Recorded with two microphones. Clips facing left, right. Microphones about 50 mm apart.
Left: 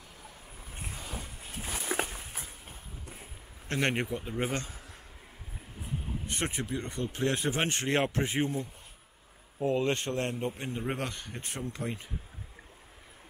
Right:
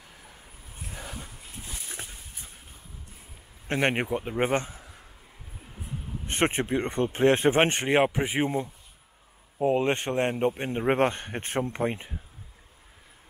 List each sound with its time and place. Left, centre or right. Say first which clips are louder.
1.7 s a sound: left 9 dB; left
3.6 s speech: right 4 dB; right
6.2 s speech: right 11 dB; right
7.9 s speech: right 5 dB; centre
9.6 s speech: right 4 dB; right
10.3 s speech: right 8 dB; right